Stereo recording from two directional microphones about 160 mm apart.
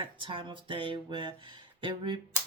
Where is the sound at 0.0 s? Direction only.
30° right (ahead or behind).